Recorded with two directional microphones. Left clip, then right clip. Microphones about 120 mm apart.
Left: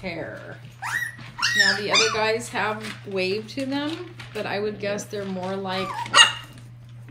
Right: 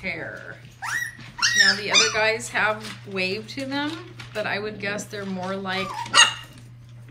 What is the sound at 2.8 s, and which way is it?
Speech, 20° left (ahead or behind).